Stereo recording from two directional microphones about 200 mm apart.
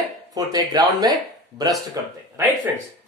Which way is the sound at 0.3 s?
20° right (ahead or behind).